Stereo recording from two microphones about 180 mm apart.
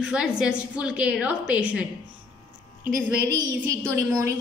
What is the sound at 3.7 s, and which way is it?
Speech, 15° right (ahead or behind).